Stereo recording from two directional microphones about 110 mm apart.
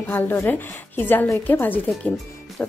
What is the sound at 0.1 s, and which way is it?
A woman's voice, 20° left (ahead or behind).